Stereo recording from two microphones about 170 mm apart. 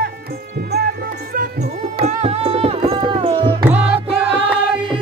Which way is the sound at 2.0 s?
40° right (ahead or behind).